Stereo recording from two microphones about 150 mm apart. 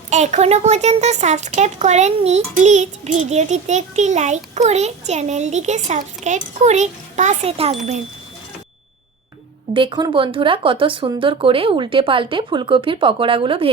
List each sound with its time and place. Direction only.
0.1 s a child's voice: 50° right (ahead or behind)
9.7 s speech: 35° right (ahead or behind)